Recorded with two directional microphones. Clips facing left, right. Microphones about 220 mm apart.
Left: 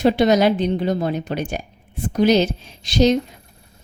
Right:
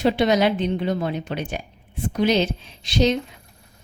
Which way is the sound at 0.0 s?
45° left (ahead or behind).